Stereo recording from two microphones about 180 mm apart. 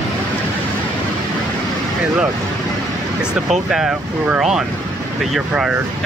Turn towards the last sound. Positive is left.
turn(degrees=-5)  # may be behind; listen again after turning